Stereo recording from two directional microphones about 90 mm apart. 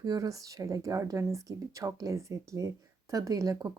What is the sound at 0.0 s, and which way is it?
Speech, 45° right (ahead or behind).